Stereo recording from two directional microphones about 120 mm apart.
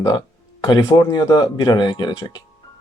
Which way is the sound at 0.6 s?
30° left (ahead or behind).